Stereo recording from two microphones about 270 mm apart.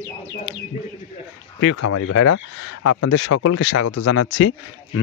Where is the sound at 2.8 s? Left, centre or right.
Left.